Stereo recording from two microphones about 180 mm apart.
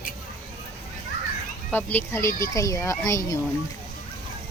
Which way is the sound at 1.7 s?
10° left (ahead or behind).